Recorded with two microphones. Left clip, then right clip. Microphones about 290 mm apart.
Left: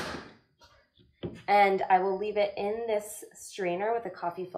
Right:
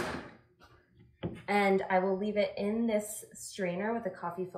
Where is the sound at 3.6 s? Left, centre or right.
Left.